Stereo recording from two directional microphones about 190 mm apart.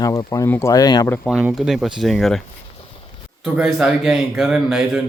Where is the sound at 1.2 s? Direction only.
Centre (ahead or behind).